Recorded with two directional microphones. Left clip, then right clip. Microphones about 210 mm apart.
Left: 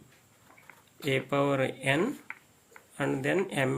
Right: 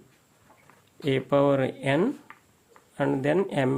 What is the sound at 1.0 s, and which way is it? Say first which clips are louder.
Speech: right 5 dB; 50° right (ahead or behind).